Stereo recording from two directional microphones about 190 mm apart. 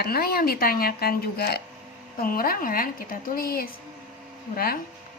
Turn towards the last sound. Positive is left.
turn(degrees=50)  # may be behind; listen again after turning